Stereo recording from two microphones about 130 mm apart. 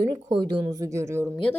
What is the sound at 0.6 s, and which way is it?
Speech, 25° right (ahead or behind).